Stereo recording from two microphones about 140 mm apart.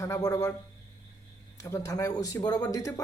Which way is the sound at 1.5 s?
20° left (ahead or behind).